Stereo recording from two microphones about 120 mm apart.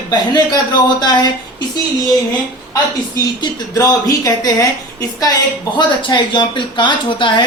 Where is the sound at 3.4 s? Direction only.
30° left (ahead or behind).